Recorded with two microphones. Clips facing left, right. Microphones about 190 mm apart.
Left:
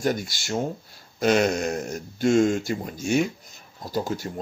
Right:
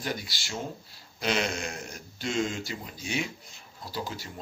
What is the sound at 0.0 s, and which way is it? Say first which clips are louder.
A man's voice: left 9 dB; 45° left (ahead or behind).